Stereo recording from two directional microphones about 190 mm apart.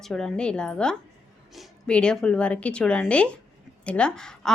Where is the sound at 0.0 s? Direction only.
5° left (ahead or behind).